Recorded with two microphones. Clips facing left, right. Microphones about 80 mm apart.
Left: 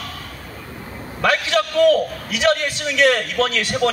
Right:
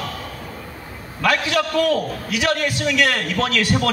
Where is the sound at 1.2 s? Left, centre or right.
Left.